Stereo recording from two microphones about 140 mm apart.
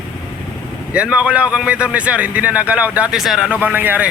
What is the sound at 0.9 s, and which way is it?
A man's voice, 10° right (ahead or behind).